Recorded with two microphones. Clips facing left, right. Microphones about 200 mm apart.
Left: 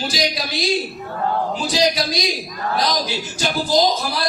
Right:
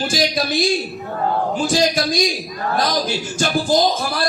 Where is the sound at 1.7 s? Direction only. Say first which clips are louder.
Even; 50° right (ahead or behind).